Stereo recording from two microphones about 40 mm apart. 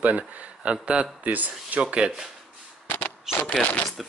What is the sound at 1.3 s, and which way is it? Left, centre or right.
Speech, right.